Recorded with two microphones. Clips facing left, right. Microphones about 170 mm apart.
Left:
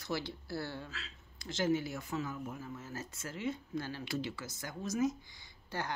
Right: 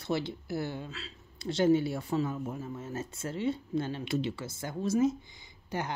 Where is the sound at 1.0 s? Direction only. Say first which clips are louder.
Right 8 dB; 30° right (ahead or behind).